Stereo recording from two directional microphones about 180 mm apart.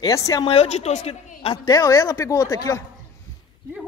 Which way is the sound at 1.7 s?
20° left (ahead or behind).